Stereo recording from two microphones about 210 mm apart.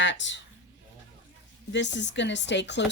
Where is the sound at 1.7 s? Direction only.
60° left (ahead or behind).